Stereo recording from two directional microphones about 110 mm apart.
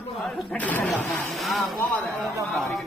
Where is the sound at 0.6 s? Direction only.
15° left (ahead or behind).